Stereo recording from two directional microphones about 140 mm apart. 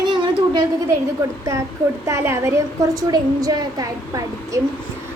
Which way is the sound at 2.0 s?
20° right (ahead or behind).